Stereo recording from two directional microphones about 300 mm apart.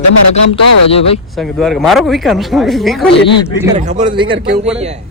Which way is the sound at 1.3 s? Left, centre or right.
Centre.